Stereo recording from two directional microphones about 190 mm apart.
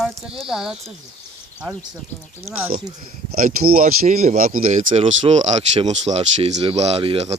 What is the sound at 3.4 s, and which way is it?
Speech, 50° right (ahead or behind).